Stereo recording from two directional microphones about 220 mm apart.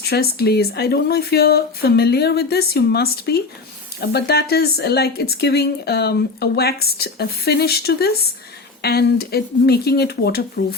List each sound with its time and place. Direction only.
0.0 s a woman's voice: 45° left (ahead or behind)